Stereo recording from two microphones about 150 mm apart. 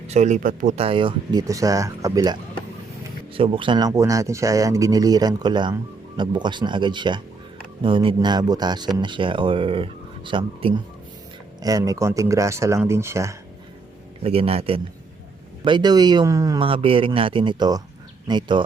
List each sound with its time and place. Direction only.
0.1 s speech: 50° right (ahead or behind); by 2.4 s 25° right (ahead or behind)
3.3 s speech: 35° right (ahead or behind)
11.6 s speech: 25° right (ahead or behind)
14.3 s speech: 40° right (ahead or behind)
15.6 s speech: 30° right (ahead or behind)
16.6 s speech: 35° right (ahead or behind)